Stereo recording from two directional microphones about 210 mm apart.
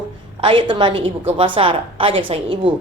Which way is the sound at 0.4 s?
20° right (ahead or behind).